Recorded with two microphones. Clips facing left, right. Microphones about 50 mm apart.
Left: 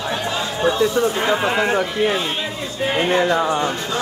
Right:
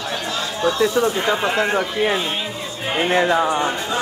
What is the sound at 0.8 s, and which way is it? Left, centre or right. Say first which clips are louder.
A man's voice: even; centre.